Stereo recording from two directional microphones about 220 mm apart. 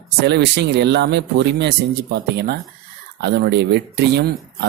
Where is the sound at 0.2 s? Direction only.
50° right (ahead or behind).